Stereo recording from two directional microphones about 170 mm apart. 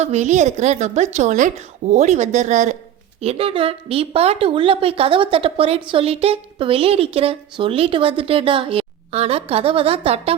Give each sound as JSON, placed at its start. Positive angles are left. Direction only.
{"t": 0.0, "sound": "a woman's voice", "side_deg": -40}